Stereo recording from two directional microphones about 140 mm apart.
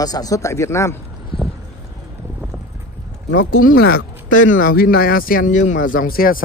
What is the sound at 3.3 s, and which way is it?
Speech, 85° left.